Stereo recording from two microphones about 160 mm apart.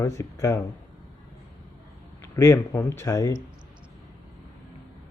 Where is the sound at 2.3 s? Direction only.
15° left (ahead or behind).